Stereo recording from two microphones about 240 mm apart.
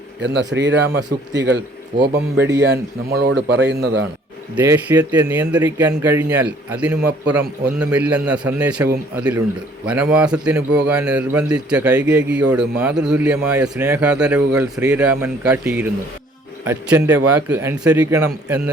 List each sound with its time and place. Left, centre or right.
0.2 s speech: right
4.5 s a man's voice: centre